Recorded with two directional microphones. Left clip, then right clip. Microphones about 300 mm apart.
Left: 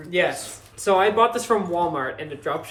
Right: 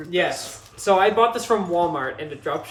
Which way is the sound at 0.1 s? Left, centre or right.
Centre.